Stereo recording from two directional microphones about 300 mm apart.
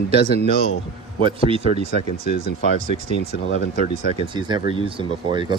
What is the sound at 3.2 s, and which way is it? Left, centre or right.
Speech, left.